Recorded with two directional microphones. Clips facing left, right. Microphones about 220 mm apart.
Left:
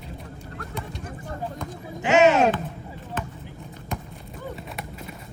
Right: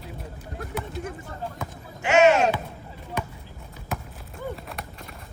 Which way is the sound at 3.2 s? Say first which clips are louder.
Right 1 dB; 15° right (ahead or behind).